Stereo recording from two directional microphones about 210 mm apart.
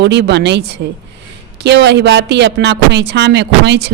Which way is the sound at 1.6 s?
55° right (ahead or behind).